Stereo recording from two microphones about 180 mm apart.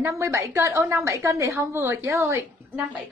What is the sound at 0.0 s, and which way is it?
A woman's voice, 15° right (ahead or behind).